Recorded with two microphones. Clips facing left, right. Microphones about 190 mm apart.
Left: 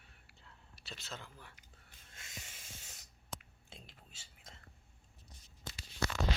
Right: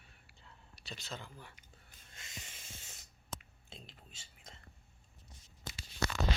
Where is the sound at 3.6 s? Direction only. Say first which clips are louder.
Right 2 dB; 10° left (ahead or behind).